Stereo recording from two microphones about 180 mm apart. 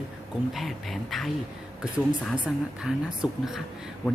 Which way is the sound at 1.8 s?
5° right (ahead or behind).